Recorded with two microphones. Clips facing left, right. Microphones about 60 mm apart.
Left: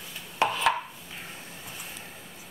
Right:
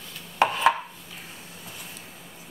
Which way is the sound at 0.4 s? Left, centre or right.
Right.